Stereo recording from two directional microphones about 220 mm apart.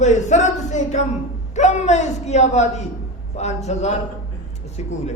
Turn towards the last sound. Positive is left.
turn(degrees=30)  # may be behind; listen again after turning